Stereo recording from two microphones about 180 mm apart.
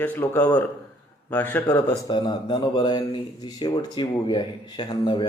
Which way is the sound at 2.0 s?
25° left (ahead or behind).